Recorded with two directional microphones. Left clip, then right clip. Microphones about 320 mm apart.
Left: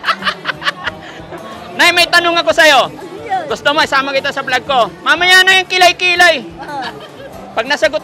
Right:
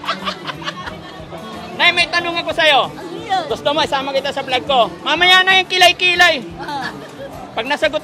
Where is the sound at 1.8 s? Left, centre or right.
Centre.